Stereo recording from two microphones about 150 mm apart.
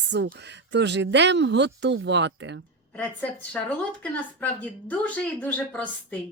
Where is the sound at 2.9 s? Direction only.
10° left (ahead or behind).